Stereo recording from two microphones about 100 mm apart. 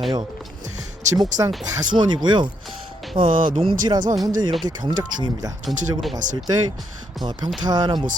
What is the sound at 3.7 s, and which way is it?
Speech, 45° right (ahead or behind).